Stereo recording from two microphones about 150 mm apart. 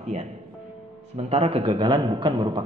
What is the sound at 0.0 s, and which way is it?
A man's voice, 50° right (ahead or behind).